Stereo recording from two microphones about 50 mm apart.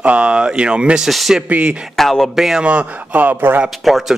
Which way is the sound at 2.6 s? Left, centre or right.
Right.